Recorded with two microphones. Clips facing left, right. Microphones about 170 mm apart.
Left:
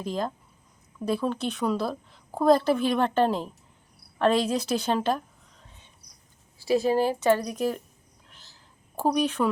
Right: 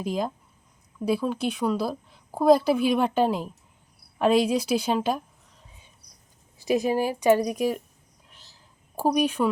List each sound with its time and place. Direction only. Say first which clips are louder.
0.0 s a woman's voice: right 2 dB; 10° right (ahead or behind)
6.6 s a woman's voice: left 1 dB; 15° right (ahead or behind)
9.0 s a woman's voice: right 1 dB; 10° right (ahead or behind)